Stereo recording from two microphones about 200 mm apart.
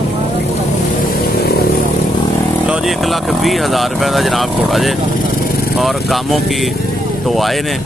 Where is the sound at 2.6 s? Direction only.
5° right (ahead or behind).